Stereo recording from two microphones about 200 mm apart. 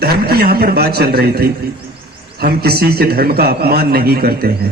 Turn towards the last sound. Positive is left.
turn(degrees=-50)  # may be behind; listen again after turning